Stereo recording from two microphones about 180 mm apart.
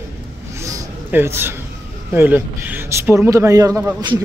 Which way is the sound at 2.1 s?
10° right (ahead or behind).